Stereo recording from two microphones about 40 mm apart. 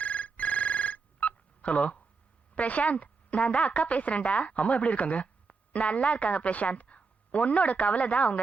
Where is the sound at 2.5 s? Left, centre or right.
Left.